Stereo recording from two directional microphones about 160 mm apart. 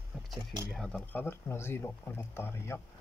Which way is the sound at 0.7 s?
5° left (ahead or behind).